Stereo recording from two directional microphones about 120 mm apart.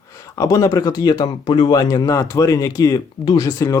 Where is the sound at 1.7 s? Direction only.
30° left (ahead or behind).